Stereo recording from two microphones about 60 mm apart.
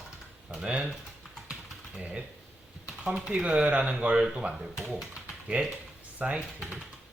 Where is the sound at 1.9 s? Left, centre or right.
Centre.